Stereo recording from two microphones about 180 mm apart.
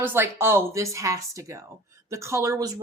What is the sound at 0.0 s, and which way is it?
Speech, 15° right (ahead or behind).